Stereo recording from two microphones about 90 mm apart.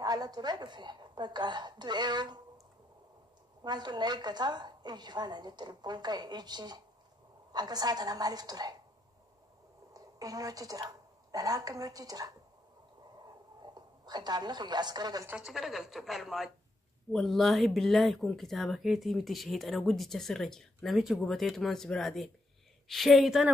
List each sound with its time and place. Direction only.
0.0 s a woman's voice: 45° right (ahead or behind)
3.6 s a woman's voice: 50° right (ahead or behind)
9.9 s a woman's voice: 40° right (ahead or behind)
13.2 s a sound: 50° right (ahead or behind)
15.3 s speech: 5° right (ahead or behind)